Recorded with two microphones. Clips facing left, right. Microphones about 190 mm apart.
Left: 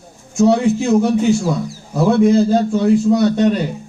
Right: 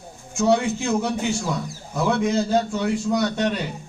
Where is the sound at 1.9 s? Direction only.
35° left (ahead or behind).